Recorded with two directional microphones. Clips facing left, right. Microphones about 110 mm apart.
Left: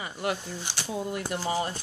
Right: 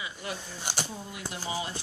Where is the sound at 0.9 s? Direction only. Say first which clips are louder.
Left 8 dB; 55° left (ahead or behind).